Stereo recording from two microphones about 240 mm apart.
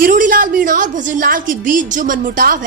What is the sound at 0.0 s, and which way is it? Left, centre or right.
A woman's voice, right.